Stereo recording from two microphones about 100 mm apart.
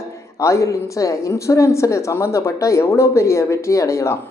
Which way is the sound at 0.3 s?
30° left (ahead or behind).